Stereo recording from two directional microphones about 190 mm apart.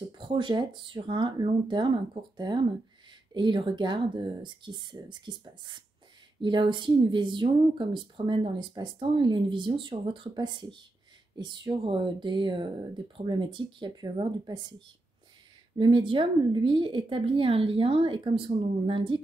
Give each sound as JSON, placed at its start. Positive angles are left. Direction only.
{"t": 0.2, "sound": "speech", "side_deg": -25}
{"t": 15.8, "sound": "speech", "side_deg": -25}